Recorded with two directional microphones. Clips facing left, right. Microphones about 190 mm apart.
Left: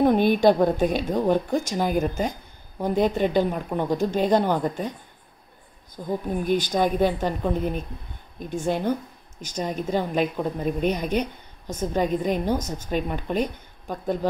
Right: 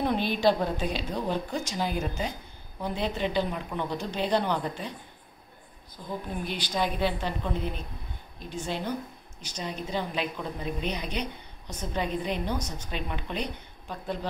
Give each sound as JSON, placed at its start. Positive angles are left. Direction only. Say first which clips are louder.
{"t": 0.0, "sound": "a woman's voice", "louder": "left 7 dB", "side_deg": 50}
{"t": 6.0, "sound": "a woman's voice", "louder": "left 9 dB", "side_deg": 45}